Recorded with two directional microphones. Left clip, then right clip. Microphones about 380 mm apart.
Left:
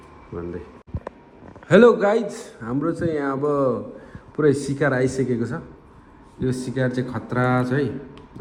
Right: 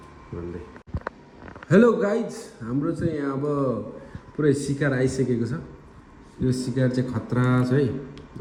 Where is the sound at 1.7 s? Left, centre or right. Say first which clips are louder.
Left 5 dB; centre.